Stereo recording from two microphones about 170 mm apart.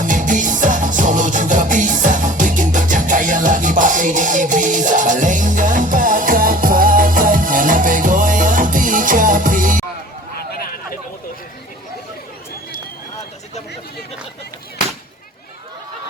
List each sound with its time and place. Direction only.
0.0 s music: 50° right (ahead or behind)